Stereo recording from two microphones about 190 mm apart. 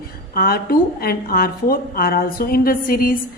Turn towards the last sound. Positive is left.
turn(degrees=50)  # may be behind; listen again after turning